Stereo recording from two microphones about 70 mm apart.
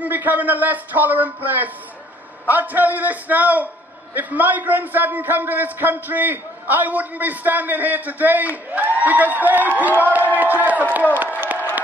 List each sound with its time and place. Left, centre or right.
0.0 s a man's voice: right